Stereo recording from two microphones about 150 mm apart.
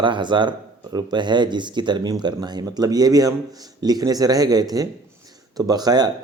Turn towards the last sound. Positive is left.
turn(degrees=-25)  # may be behind; listen again after turning